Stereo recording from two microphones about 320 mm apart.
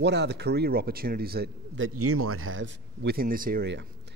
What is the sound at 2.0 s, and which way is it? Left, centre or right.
Speech, right.